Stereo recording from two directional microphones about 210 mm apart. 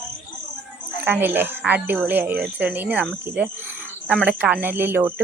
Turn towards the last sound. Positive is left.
turn(degrees=-10)  # may be behind; listen again after turning